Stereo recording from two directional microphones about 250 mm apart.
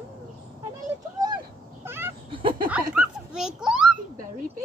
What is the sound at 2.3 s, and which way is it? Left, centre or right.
Speech, centre.